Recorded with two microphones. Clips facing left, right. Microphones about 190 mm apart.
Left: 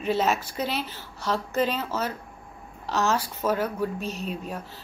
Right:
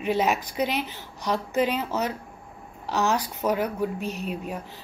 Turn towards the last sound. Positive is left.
turn(degrees=-10)  # may be behind; listen again after turning